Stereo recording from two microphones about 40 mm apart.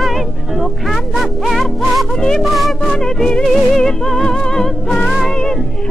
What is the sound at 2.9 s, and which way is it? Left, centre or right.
Music, centre.